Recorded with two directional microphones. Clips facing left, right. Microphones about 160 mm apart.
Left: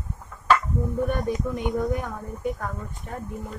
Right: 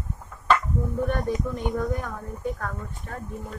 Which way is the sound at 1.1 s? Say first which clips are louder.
Even; 15° left (ahead or behind).